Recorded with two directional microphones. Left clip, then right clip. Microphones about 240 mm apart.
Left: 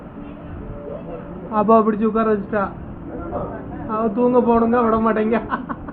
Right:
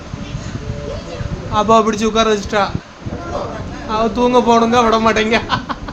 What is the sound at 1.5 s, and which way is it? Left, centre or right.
A man's voice, centre.